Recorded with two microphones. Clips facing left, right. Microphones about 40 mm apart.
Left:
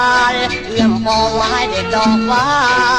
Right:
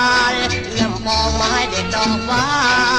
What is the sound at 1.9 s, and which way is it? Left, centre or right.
Music, left.